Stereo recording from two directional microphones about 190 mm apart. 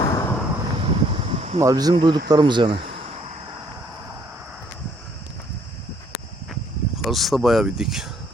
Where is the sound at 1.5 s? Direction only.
20° right (ahead or behind).